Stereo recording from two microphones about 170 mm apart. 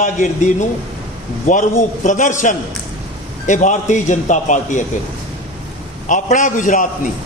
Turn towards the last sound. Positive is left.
turn(degrees=50)  # may be behind; listen again after turning